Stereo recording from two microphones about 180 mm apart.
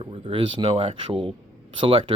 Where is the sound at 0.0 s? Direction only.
30° right (ahead or behind).